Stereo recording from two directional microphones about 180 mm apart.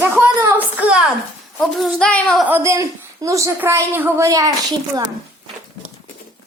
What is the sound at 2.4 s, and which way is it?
A woman's voice, 15° right (ahead or behind).